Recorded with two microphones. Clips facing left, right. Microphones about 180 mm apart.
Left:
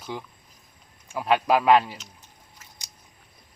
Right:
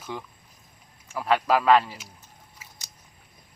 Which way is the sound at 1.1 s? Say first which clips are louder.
Left 1 dB; 15° left (ahead or behind).